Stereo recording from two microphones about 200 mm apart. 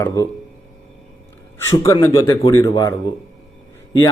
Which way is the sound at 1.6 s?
15° left (ahead or behind).